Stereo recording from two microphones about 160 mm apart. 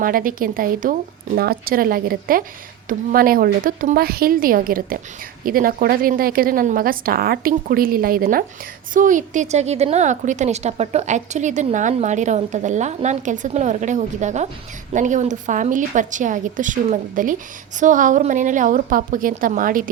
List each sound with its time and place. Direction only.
0.0 s a woman's voice: 60° right (ahead or behind)